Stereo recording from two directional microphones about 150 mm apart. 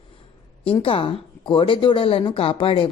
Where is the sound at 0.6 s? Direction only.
35° left (ahead or behind).